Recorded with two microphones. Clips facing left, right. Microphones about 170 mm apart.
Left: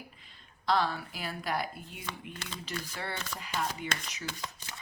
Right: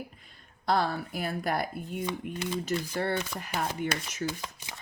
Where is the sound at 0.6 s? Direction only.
50° right (ahead or behind).